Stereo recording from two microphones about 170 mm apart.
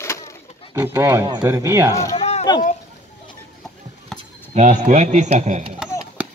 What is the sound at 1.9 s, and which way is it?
Speech, 20° left (ahead or behind).